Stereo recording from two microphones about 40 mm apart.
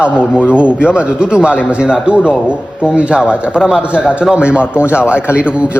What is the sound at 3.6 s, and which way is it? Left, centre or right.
Speech, centre.